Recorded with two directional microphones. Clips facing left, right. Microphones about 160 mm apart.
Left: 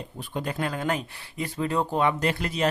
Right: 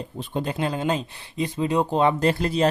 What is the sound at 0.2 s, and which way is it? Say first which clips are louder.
Speech: right 3 dB; 25° right (ahead or behind).